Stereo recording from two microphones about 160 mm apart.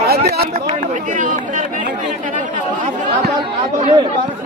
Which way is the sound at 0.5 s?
50° right (ahead or behind).